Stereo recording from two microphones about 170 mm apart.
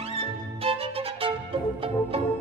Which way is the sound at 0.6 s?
35° right (ahead or behind).